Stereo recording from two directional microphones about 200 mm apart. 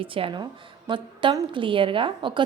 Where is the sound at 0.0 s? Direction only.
25° right (ahead or behind).